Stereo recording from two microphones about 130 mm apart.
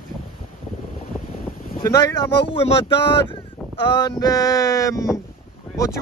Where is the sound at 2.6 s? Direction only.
45° left (ahead or behind).